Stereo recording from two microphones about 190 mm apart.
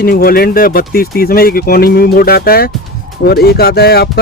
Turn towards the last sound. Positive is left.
turn(degrees=55)  # may be behind; listen again after turning